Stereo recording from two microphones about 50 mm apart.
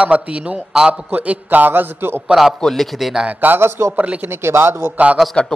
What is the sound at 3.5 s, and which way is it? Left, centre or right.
A man's voice, right.